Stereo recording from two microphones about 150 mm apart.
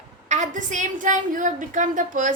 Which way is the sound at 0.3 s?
55° right (ahead or behind).